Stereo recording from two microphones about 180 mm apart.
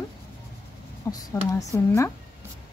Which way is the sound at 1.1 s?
20° left (ahead or behind).